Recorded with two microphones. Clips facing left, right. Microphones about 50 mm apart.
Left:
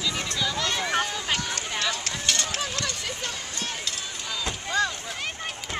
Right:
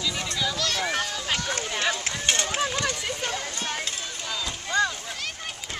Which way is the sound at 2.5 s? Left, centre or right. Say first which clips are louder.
Right 4 dB; centre.